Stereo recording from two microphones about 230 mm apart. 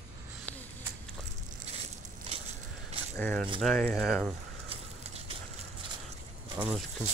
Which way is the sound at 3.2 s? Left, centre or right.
Centre.